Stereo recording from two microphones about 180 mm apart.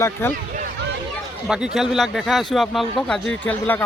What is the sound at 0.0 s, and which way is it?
Speech, 10° left (ahead or behind).